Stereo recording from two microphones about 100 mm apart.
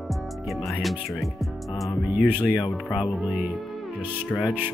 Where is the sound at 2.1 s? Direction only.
15° right (ahead or behind).